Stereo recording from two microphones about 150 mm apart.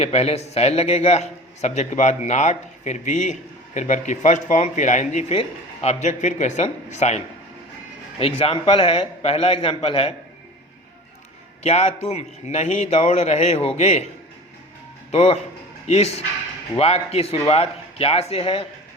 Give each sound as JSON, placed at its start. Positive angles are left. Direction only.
{"t": 0.0, "sound": "speech", "side_deg": 45}
{"t": 8.2, "sound": "a man's voice", "side_deg": 40}
{"t": 11.6, "sound": "speech", "side_deg": 45}
{"t": 15.1, "sound": "a man's voice", "side_deg": 45}